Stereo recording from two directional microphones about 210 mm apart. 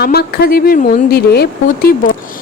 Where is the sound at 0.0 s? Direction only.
50° left (ahead or behind).